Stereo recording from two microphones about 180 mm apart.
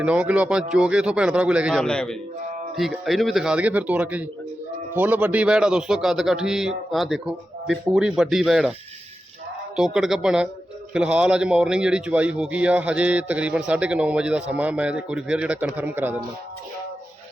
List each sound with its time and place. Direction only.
0.0 s a man's voice: 5° right (ahead or behind)
9.7 s a man's voice: centre (ahead or behind)